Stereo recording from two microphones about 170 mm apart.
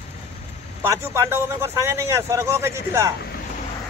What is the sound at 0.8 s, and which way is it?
Speech, 15° right (ahead or behind).